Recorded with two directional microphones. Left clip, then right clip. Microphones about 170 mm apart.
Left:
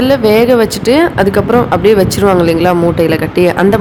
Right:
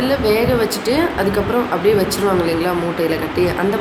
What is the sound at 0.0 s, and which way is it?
Speech, 50° left (ahead or behind).